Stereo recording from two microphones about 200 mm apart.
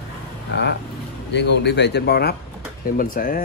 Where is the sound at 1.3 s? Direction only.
60° left (ahead or behind).